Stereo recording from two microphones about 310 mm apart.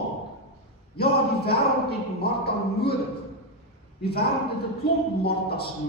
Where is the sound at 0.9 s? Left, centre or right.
Left.